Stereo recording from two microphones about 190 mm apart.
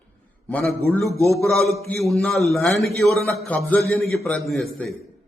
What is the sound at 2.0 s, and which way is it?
A man's voice, centre (ahead or behind).